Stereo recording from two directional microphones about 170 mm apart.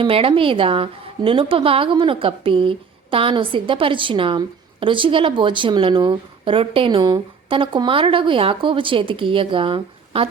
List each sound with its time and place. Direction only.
0.0 s a woman's voice: 30° right (ahead or behind)